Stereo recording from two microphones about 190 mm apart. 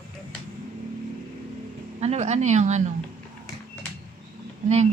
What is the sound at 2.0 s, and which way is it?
Speech, 35° right (ahead or behind).